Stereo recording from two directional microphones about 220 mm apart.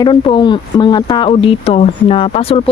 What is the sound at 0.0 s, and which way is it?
Speech, 20° left (ahead or behind).